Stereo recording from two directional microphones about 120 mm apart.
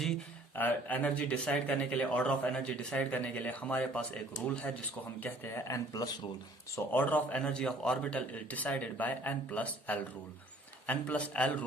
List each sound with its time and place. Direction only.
0.5 s speech: 15° left (ahead or behind)
5.2 s speech: 20° left (ahead or behind)
6.7 s speech: 15° left (ahead or behind)